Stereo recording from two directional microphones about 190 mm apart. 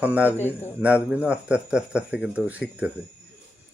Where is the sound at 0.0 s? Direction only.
10° right (ahead or behind).